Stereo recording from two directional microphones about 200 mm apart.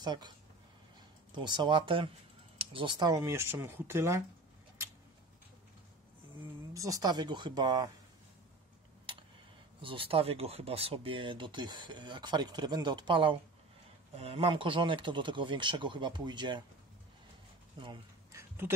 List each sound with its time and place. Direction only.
0.0 s speech: 20° right (ahead or behind)
1.3 s speech: 20° right (ahead or behind)
6.7 s speech: 15° right (ahead or behind)
9.1 s tick: 25° right (ahead or behind)
9.8 s speech: 25° right (ahead or behind)
17.7 s a sound: 25° right (ahead or behind)